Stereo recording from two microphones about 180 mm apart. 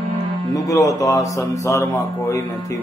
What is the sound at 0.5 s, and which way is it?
Speech, 20° left (ahead or behind).